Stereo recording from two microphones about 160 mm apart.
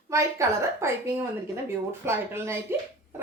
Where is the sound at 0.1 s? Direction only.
15° right (ahead or behind).